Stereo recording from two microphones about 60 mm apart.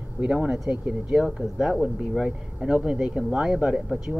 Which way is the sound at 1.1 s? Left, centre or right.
Centre.